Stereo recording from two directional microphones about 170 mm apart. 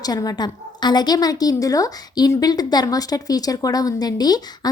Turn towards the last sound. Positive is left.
turn(degrees=25)  # may be behind; listen again after turning